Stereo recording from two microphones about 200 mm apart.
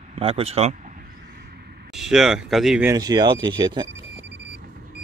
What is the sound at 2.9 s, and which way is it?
Speech, 20° right (ahead or behind).